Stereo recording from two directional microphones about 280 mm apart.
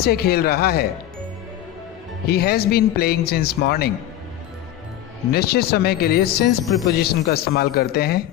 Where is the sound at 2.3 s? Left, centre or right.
Left.